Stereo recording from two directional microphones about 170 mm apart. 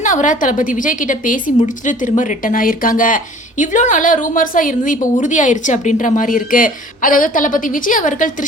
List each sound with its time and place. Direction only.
0.0 s a woman's voice: 50° left (ahead or behind)